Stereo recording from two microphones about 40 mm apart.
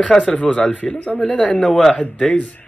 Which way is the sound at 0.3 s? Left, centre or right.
Left.